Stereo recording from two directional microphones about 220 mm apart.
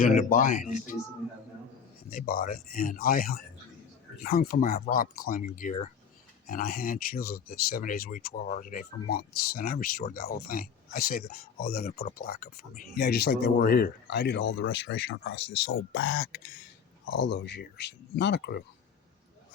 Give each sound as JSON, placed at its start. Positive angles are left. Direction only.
{"t": 0.0, "sound": "speech", "side_deg": 40}
{"t": 2.0, "sound": "speech", "side_deg": 40}